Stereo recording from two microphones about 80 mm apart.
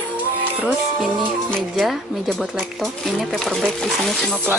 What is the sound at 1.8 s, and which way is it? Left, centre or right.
Speech, centre.